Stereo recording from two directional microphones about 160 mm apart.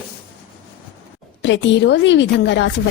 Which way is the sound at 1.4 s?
90° left.